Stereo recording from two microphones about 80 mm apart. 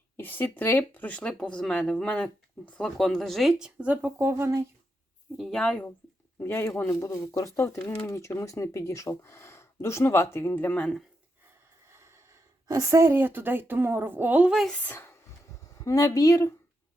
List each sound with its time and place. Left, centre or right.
0.2 s speech: left
3.0 s speech: centre
3.6 s speech: centre
4.2 s speech: right
5.4 s speech: centre
6.4 s speech: left
11.9 s speech: right
14.8 s speech: left
15.8 s speech: left